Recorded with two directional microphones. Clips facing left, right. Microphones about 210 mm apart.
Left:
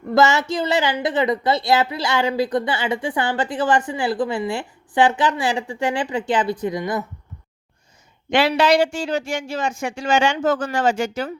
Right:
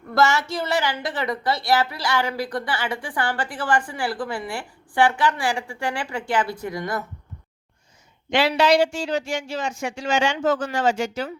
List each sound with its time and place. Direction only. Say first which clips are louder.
0.1 s a woman's voice: left 4 dB; 20° left (ahead or behind)
8.3 s speech: left 2 dB; 55° left (ahead or behind)